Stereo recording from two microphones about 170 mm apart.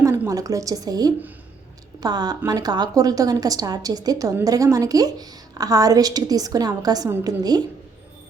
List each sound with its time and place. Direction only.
0.0 s a woman's voice: 20° right (ahead or behind)